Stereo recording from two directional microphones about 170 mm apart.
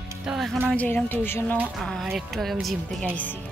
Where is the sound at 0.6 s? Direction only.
10° left (ahead or behind).